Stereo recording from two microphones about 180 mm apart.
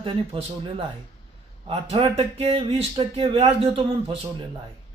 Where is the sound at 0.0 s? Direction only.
30° right (ahead or behind).